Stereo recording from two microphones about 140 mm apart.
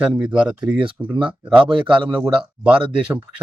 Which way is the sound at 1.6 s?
35° right (ahead or behind).